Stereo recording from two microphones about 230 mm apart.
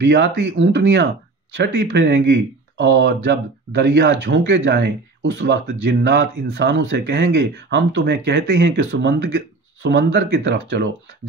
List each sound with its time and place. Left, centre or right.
0.0 s speech: right